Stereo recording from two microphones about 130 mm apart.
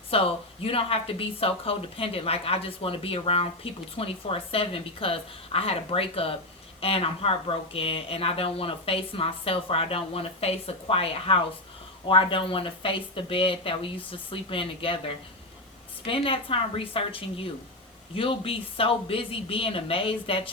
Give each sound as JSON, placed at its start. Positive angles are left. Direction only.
{"t": 0.1, "sound": "speech", "side_deg": 45}